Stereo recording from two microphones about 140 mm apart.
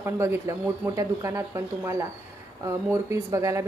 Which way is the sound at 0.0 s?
20° right (ahead or behind).